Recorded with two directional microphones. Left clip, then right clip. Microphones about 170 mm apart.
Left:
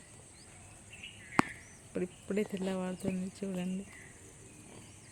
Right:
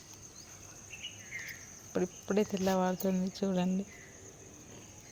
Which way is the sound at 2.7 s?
25° right (ahead or behind).